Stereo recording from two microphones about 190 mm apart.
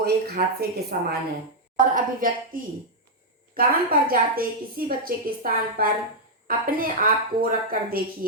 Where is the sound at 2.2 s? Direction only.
45° right (ahead or behind).